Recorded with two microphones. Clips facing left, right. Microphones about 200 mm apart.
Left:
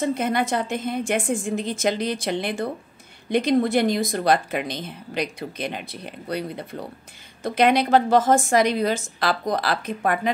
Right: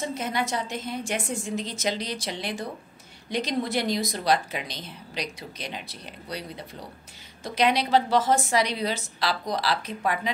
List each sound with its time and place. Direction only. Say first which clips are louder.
0.0 s a woman's voice: left 6 dB; 55° left (ahead or behind)